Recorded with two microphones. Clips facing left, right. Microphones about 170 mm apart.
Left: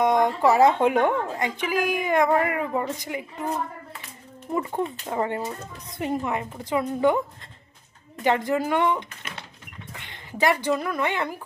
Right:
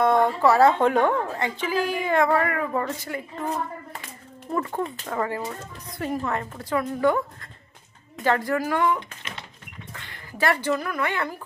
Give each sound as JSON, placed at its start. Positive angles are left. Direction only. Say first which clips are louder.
{"t": 0.0, "sound": "speech", "louder": "right 1 dB", "side_deg": 15}
{"t": 4.5, "sound": "a woman's voice", "louder": "left 1 dB", "side_deg": 20}
{"t": 8.2, "sound": "a woman's voice", "louder": "left 1 dB", "side_deg": 20}